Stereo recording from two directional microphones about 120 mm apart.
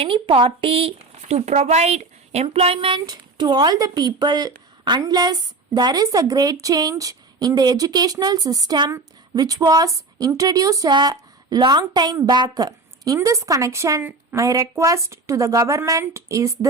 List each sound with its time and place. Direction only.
0.0 s a woman's voice: 45° right (ahead or behind); by 16.6 s 25° right (ahead or behind)